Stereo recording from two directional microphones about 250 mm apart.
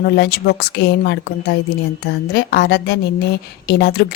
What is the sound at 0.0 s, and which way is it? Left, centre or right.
Speech, left.